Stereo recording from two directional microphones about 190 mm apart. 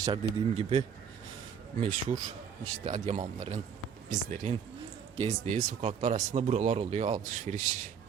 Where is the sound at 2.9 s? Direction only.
40° right (ahead or behind).